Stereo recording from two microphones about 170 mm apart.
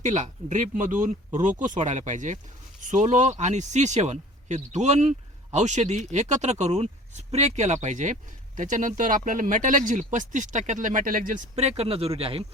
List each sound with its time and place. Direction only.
0.0 s speech: 45° right (ahead or behind)